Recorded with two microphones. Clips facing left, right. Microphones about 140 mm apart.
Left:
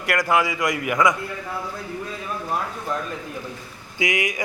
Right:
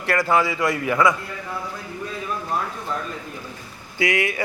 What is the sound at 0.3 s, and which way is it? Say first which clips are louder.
Speech: even; 15° left (ahead or behind).